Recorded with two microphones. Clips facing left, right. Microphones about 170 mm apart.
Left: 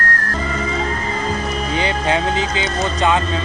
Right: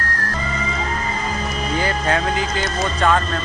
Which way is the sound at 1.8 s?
20° left (ahead or behind).